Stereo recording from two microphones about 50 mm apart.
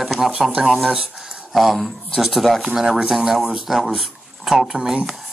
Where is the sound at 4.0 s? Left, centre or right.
Centre.